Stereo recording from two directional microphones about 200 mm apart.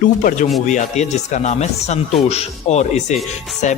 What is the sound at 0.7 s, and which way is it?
Speech, 35° left (ahead or behind).